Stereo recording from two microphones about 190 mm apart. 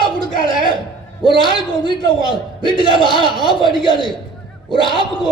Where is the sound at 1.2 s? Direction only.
25° left (ahead or behind).